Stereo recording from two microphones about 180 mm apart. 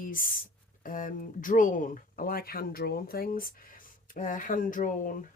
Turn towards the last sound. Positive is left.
turn(degrees=50)  # may be behind; listen again after turning